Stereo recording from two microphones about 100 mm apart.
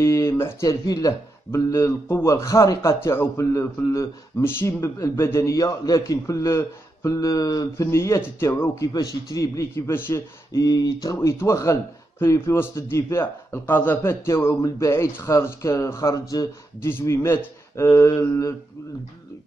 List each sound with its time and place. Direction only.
0.0 s a sound: 30° left (ahead or behind)
0.7 s a man's voice: 40° left (ahead or behind)
1.5 s a man's voice: 30° left (ahead or behind)
8.9 s a man's voice: 35° left (ahead or behind)